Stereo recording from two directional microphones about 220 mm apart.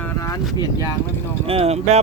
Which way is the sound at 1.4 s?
25° right (ahead or behind).